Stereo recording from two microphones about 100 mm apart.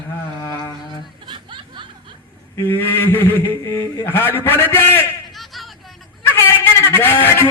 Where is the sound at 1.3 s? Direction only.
55° right (ahead or behind).